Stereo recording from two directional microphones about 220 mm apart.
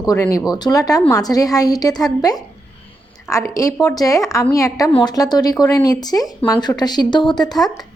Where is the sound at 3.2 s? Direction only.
15° left (ahead or behind).